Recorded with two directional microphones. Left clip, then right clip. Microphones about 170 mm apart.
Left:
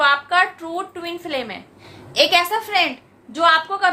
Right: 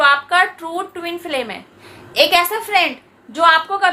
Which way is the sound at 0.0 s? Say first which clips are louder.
Right 3 dB; 15° right (ahead or behind).